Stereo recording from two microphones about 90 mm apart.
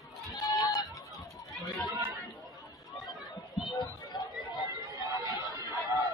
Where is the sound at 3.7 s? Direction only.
50° left (ahead or behind).